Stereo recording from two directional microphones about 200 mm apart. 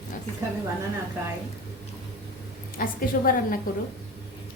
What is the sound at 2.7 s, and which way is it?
Speech, 45° left (ahead or behind).